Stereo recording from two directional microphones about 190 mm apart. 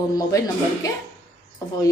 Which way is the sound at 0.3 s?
15° left (ahead or behind).